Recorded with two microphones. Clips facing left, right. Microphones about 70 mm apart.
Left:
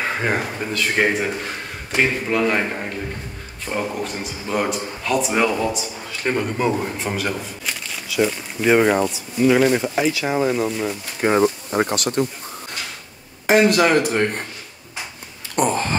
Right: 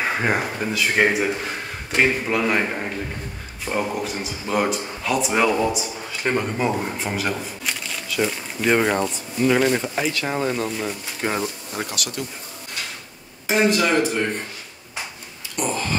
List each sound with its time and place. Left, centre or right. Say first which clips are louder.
0.0 s speech: even; centre
11.1 s speech: left 9 dB; left
13.5 s speech: left 4 dB; left
15.5 s a sound: left 5 dB; left